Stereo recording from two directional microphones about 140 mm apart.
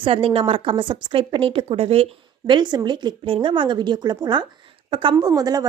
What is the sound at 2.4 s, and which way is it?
A woman's voice, 35° right (ahead or behind).